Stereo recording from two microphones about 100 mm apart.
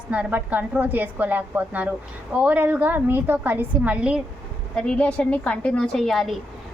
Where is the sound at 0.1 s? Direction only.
15° right (ahead or behind).